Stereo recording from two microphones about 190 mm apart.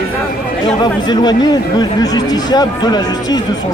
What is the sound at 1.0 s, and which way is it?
Speech, 20° left (ahead or behind).